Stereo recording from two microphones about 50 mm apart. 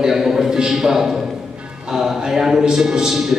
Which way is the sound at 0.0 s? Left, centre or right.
Centre.